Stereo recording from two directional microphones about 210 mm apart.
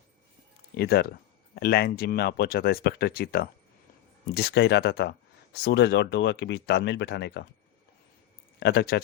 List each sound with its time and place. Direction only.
0.8 s speech: 45° left (ahead or behind)
8.5 s speech: 50° left (ahead or behind)